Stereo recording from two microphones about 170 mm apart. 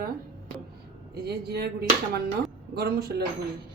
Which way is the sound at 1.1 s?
70° right (ahead or behind).